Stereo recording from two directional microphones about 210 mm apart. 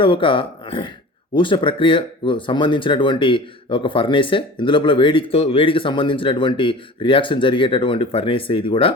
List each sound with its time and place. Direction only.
0.0 s speech: 25° left (ahead or behind)